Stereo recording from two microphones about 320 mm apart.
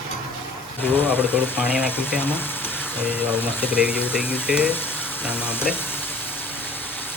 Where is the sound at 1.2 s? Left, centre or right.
Centre.